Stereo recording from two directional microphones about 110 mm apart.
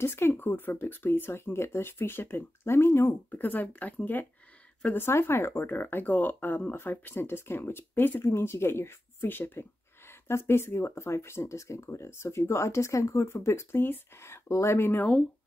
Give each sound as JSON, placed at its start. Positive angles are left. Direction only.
{"t": 0.0, "sound": "speech", "side_deg": 20}